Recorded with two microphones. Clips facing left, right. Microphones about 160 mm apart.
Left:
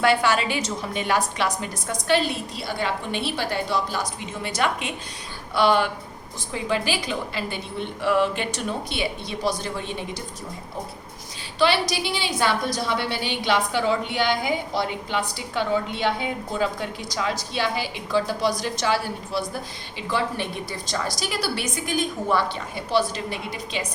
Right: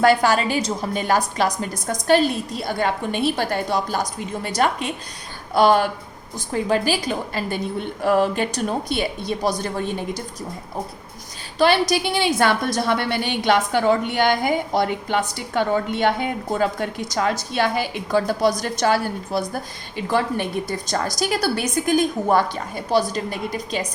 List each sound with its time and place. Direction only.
0.0 s a woman's voice: 40° right (ahead or behind)
11.6 s a woman's voice: 50° right (ahead or behind)